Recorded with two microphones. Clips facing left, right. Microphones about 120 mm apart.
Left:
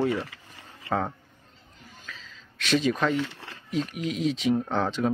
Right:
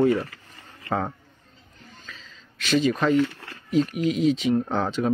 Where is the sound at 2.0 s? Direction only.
Centre (ahead or behind).